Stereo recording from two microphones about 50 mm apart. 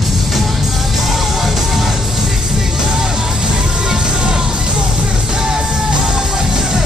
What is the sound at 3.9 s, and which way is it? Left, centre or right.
Music, centre.